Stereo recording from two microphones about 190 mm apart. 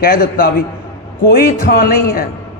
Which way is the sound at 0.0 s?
50° left (ahead or behind).